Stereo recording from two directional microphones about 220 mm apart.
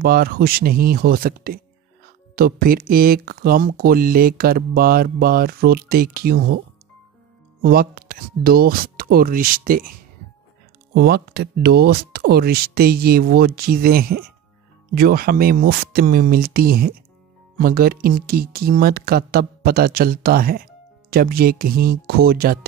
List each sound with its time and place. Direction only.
0.0 s speech: 40° right (ahead or behind)
7.6 s speech: 45° right (ahead or behind)
11.0 s speech: 45° right (ahead or behind)